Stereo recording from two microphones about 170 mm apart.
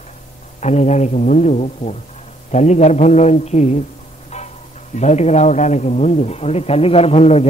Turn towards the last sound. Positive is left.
turn(degrees=40)  # may be behind; listen again after turning